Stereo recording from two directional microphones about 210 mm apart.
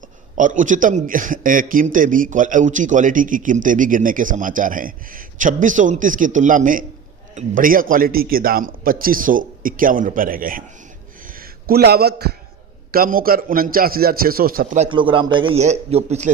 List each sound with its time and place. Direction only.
0.3 s a man's voice: 40° right (ahead or behind)
14.8 s a man's voice: 25° right (ahead or behind)